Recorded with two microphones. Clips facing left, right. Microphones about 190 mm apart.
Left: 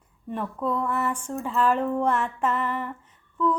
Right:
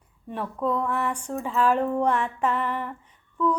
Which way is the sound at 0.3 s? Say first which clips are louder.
Right 1 dB; centre (ahead or behind).